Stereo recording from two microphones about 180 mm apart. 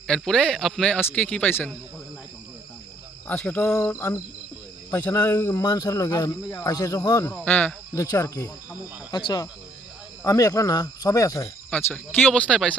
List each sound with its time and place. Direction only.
0.1 s speech: 5° left (ahead or behind)
3.2 s cricket: 5° left (ahead or behind)
4.9 s speech: 15° left (ahead or behind)
7.4 s cricket: 10° left (ahead or behind)
9.1 s speech: 25° left (ahead or behind)
11.7 s cricket: 10° left (ahead or behind)
12.2 s speech: 5° left (ahead or behind)